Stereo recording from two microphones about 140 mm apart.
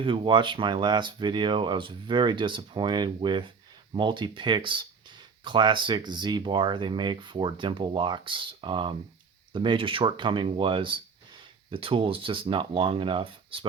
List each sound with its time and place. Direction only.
0.0 s speech: 35° right (ahead or behind)